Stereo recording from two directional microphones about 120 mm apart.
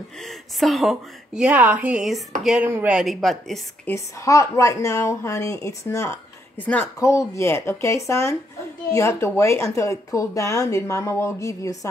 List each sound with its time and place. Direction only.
0.2 s a woman's voice: centre (ahead or behind)
3.0 s a woman's voice: centre (ahead or behind)
3.8 s speech: 25° left (ahead or behind)